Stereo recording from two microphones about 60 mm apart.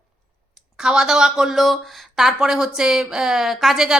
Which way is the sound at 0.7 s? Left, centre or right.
Centre.